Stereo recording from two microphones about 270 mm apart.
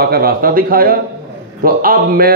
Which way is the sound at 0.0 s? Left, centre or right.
Right.